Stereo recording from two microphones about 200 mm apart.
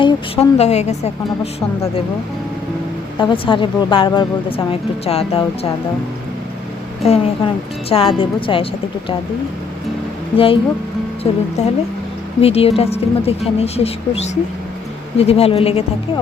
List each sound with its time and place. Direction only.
0.0 s a woman's voice: 30° left (ahead or behind)
3.2 s speech: 25° left (ahead or behind)
7.0 s speech: 30° left (ahead or behind)
10.3 s a woman's voice: 25° left (ahead or behind)